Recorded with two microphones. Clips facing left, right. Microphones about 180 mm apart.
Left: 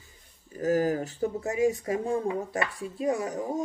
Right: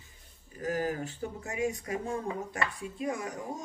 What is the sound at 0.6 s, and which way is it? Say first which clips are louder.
Speech: left 7 dB; 40° left (ahead or behind).